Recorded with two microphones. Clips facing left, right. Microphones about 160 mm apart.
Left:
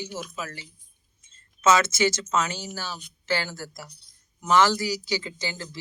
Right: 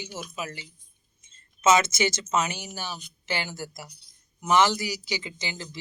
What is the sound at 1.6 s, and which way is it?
A man's voice, 20° right (ahead or behind).